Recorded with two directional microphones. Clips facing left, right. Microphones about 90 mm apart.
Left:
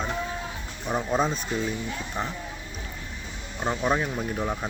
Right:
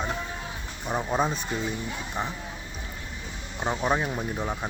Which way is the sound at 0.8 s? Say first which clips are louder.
Left 1 dB; 10° right (ahead or behind).